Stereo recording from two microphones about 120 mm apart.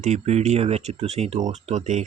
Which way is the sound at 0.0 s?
75° right (ahead or behind).